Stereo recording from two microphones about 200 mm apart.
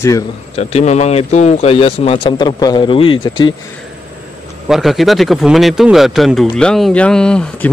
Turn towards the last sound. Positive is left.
turn(degrees=5)  # may be behind; listen again after turning